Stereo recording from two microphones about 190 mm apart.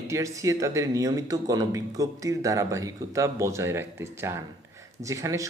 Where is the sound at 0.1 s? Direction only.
15° right (ahead or behind).